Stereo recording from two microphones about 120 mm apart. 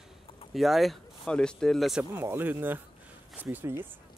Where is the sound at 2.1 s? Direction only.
20° right (ahead or behind).